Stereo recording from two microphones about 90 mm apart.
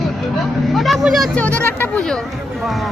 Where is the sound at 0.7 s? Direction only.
Centre (ahead or behind).